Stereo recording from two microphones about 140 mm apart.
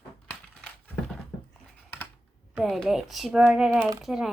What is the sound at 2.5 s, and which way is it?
Speech, centre (ahead or behind).